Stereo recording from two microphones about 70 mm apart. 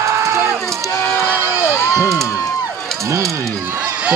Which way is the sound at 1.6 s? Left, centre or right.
Left.